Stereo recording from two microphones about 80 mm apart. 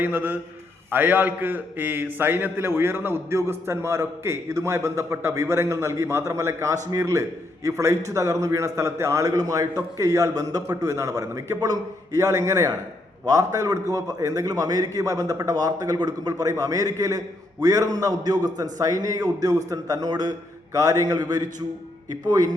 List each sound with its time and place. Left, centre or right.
0.0 s a man's voice: right
20.7 s a man's voice: right